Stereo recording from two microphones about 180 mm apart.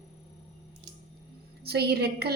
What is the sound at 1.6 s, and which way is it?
Speech, 65° right (ahead or behind).